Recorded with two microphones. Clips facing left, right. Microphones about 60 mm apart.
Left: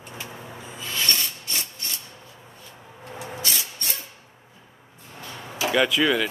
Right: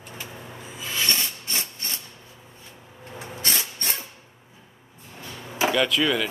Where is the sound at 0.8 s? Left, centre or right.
Centre.